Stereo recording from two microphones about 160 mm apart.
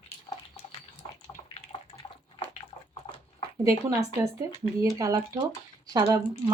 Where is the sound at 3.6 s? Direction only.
20° right (ahead or behind).